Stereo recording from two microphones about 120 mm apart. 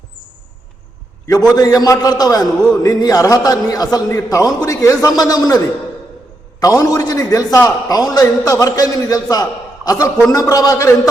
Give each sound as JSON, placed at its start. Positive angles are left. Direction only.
{"t": 1.3, "sound": "a man's voice", "side_deg": 30}
{"t": 6.6, "sound": "a man's voice", "side_deg": 30}